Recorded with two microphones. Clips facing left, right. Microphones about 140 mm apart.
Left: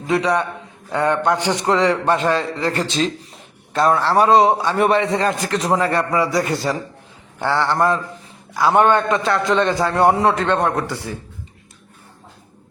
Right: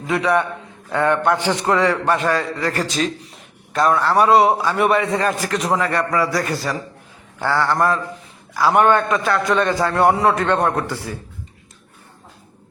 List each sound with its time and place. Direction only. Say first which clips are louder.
0.1 s a man's voice: even; 20° left (ahead or behind)
4.7 s a man's voice: left 1 dB; 35° left (ahead or behind)